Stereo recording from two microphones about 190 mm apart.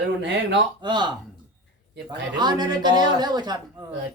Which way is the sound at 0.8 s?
25° right (ahead or behind).